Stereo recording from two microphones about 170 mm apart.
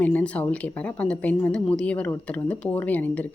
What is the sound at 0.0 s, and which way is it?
Speech, 10° left (ahead or behind).